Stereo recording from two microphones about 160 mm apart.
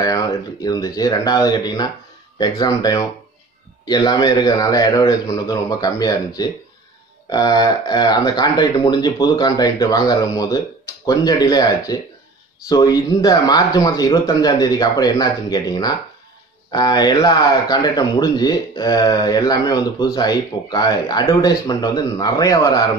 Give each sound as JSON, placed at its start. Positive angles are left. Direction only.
{"t": 0.7, "sound": "speech", "side_deg": 25}